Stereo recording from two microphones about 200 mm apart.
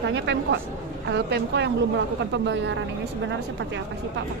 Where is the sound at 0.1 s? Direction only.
65° right (ahead or behind).